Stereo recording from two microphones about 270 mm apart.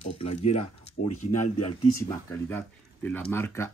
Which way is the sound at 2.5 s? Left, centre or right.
Centre.